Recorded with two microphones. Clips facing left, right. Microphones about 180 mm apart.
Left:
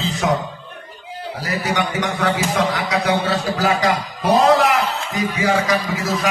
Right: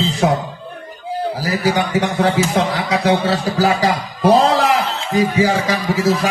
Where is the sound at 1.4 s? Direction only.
30° right (ahead or behind).